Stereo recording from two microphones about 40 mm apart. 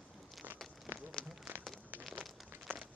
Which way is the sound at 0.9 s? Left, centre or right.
Right.